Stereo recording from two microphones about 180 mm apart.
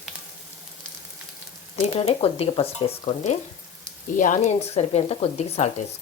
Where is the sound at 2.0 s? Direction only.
35° left (ahead or behind).